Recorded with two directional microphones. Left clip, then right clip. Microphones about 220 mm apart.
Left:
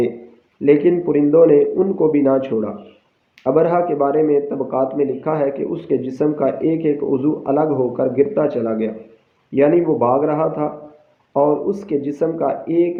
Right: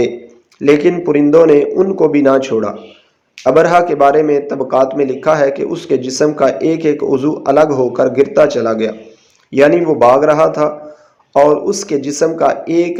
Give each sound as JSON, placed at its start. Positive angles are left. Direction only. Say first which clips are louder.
{"t": 0.6, "sound": "a man's voice", "louder": "right 3 dB", "side_deg": -20}